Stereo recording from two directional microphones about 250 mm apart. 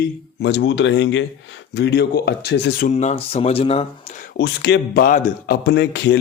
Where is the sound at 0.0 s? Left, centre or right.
Left.